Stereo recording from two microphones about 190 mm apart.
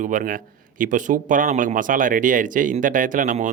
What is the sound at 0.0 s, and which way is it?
Speech, 45° right (ahead or behind).